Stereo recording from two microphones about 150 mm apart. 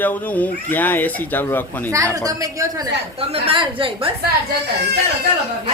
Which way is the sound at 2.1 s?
25° right (ahead or behind).